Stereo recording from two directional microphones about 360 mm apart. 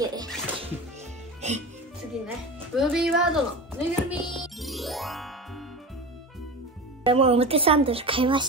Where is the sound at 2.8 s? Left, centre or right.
Centre.